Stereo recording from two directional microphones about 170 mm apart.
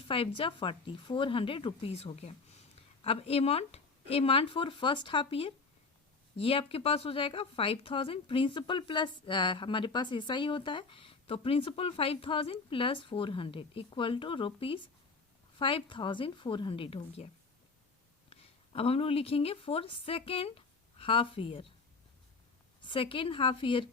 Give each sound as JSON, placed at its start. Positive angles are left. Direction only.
{"t": 0.1, "sound": "a woman's voice", "side_deg": 30}
{"t": 18.3, "sound": "speech", "side_deg": 35}
{"t": 22.9, "sound": "a woman's voice", "side_deg": 30}